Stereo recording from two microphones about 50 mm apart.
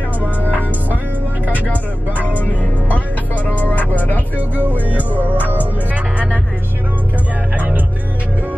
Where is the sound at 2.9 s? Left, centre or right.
Left.